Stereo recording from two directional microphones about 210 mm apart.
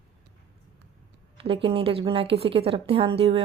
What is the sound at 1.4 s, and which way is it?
A woman's voice, 25° right (ahead or behind).